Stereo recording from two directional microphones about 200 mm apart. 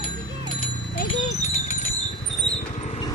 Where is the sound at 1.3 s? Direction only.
35° left (ahead or behind).